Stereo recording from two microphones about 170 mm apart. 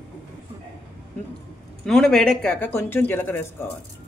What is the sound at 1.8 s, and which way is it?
Speech, 5° left (ahead or behind).